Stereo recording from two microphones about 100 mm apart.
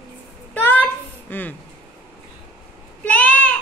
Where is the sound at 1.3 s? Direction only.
20° left (ahead or behind).